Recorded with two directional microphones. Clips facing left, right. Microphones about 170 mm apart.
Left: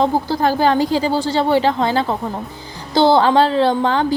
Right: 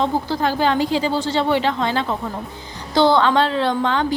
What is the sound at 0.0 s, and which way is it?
A woman's voice, 40° left (ahead or behind).